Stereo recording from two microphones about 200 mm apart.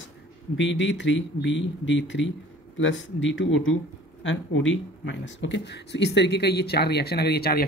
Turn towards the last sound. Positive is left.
turn(degrees=50)  # may be behind; listen again after turning